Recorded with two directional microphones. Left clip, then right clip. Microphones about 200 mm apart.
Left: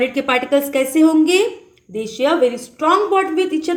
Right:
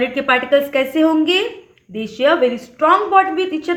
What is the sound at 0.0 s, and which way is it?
A woman's voice, 35° left (ahead or behind).